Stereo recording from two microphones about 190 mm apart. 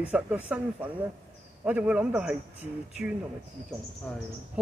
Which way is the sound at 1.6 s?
5° right (ahead or behind).